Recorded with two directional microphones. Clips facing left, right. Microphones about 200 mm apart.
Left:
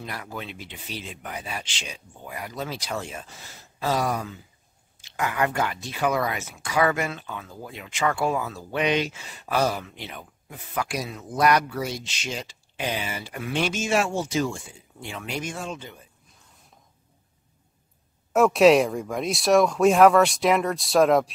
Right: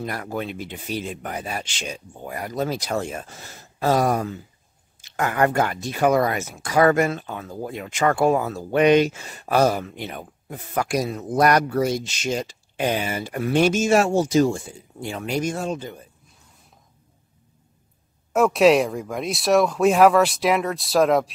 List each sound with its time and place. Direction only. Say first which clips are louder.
0.0 s speech: right 7 dB; 50° right (ahead or behind)
18.3 s speech: even; centre (ahead or behind)